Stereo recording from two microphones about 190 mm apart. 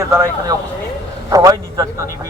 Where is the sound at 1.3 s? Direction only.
20° right (ahead or behind).